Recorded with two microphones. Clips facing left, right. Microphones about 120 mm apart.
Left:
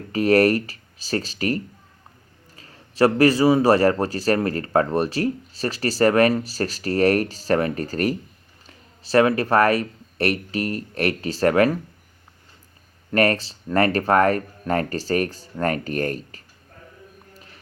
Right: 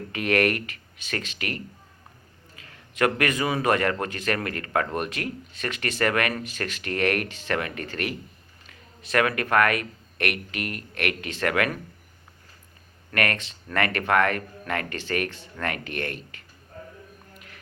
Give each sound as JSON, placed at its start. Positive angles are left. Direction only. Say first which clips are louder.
{"t": 0.1, "sound": "a man's voice", "louder": "left 7 dB", "side_deg": 35}
{"t": 13.1, "sound": "a man's voice", "louder": "left 7 dB", "side_deg": 35}
{"t": 17.3, "sound": "a sound", "louder": "left 1 dB", "side_deg": 30}